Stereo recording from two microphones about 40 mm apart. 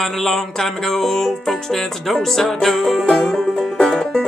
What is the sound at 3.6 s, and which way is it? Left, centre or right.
Music, centre.